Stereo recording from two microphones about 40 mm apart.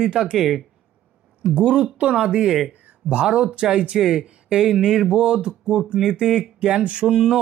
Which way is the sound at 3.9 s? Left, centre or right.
Centre.